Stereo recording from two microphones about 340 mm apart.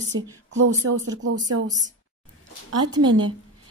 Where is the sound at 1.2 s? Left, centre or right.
Right.